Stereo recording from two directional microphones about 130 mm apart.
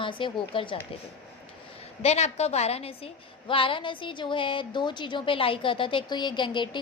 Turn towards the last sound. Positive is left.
turn(degrees=35)  # may be behind; listen again after turning